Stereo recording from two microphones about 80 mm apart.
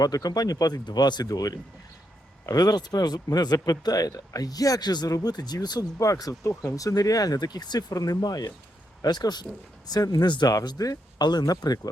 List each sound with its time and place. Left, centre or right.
0.0 s speech: left
6.0 s speech: left
10.2 s speech: left
10.5 s speech: left